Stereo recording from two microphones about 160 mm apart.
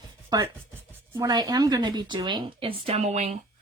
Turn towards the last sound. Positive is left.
turn(degrees=-45)  # may be behind; listen again after turning